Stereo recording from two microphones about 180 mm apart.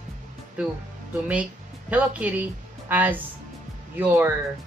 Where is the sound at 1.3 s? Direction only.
10° right (ahead or behind).